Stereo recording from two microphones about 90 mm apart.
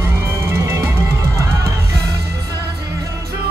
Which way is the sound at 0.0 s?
30° right (ahead or behind).